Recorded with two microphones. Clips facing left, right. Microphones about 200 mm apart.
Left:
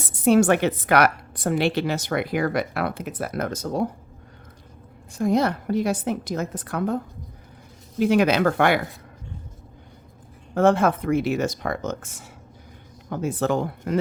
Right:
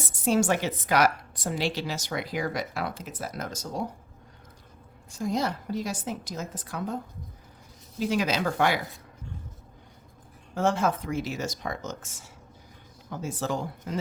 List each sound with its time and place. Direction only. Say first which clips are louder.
0.0 s a woman's voice: left 7 dB; 60° left (ahead or behind)
5.1 s a woman's voice: left 7 dB; 60° left (ahead or behind)
10.5 s a woman's voice: left 7 dB; 60° left (ahead or behind)